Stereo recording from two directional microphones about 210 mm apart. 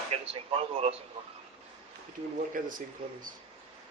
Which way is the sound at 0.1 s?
30° right (ahead or behind).